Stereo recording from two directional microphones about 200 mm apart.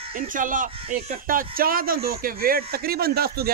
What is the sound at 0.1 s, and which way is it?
Speech, 40° right (ahead or behind).